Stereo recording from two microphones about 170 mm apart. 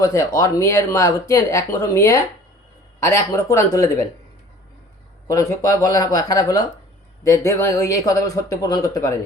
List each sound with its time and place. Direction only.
0.0 s speech: 15° left (ahead or behind)
5.3 s speech: 20° left (ahead or behind)